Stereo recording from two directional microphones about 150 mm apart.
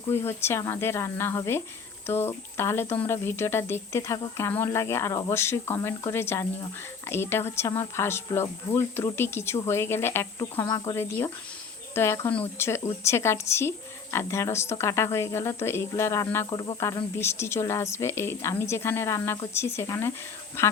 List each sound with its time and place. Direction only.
0.1 s a woman's voice: 15° left (ahead or behind)
16.5 s speech: 30° left (ahead or behind)
17.2 s a woman's voice: 15° left (ahead or behind)